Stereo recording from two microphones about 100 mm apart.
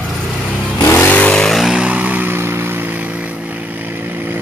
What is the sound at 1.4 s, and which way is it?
Vehicle, centre (ahead or behind).